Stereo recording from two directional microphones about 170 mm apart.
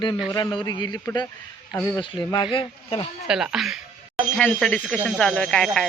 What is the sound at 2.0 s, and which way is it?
Speech, 30° left (ahead or behind).